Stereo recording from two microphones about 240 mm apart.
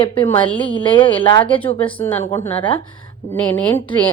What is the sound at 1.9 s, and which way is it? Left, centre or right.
A woman's voice, centre.